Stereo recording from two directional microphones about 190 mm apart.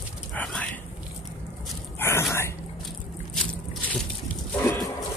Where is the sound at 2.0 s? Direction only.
15° left (ahead or behind).